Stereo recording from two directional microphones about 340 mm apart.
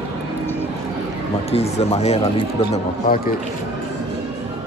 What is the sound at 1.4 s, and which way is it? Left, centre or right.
Speech, centre.